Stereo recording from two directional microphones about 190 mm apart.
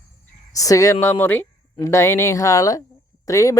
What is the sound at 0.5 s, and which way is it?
Speech, 15° left (ahead or behind).